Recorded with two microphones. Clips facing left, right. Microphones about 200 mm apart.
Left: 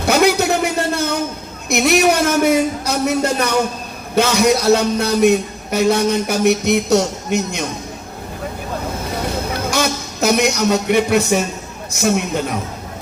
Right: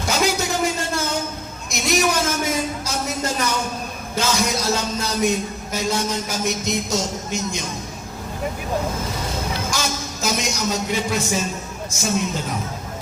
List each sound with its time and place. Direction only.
0.0 s a sound: 65° left (ahead or behind)
1.7 s a man's voice: 65° left (ahead or behind)
9.6 s a man's voice: 65° left (ahead or behind)